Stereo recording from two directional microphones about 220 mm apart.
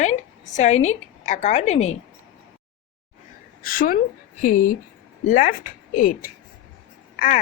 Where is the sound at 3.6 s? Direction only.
40° left (ahead or behind).